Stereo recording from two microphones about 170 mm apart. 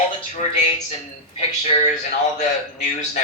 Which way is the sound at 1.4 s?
40° left (ahead or behind).